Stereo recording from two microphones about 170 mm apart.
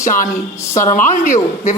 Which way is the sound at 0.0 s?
50° left (ahead or behind).